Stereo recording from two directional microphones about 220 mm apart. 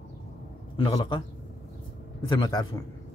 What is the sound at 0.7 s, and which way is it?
Speech, 20° left (ahead or behind).